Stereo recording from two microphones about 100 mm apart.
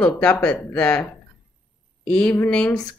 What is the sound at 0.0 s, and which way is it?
A woman's voice, 15° left (ahead or behind).